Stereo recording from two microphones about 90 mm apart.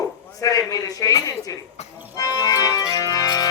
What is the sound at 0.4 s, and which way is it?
Speech, 40° left (ahead or behind).